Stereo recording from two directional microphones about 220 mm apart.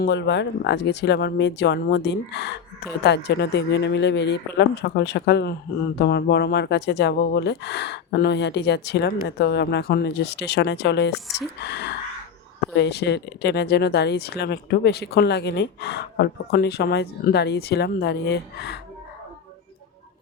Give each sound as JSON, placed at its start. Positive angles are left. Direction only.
{"t": 0.0, "sound": "speech", "side_deg": 50}